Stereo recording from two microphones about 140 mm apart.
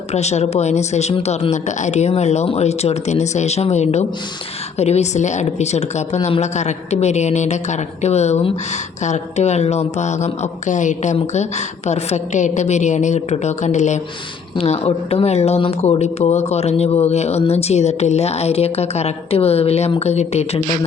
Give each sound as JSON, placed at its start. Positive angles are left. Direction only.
{"t": 0.1, "sound": "speech", "side_deg": 50}